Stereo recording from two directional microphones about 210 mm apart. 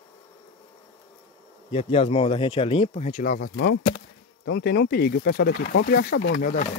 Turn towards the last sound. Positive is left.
turn(degrees=45)  # may be behind; listen again after turning